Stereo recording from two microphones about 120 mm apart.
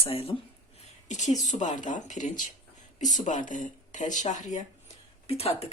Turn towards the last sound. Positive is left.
turn(degrees=55)  # may be behind; listen again after turning